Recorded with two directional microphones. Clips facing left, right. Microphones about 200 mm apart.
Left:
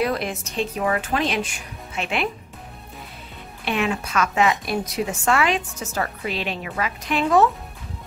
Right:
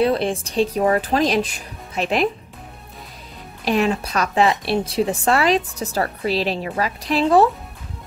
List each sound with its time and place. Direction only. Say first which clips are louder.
0.0 s a woman's voice: right 5 dB; 30° right (ahead or behind)
3.6 s a woman's voice: right 5 dB; 35° right (ahead or behind)